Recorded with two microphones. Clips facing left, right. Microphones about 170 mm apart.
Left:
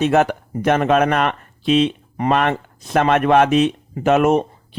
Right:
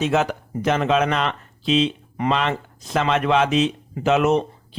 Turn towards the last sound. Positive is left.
turn(degrees=50)  # may be behind; listen again after turning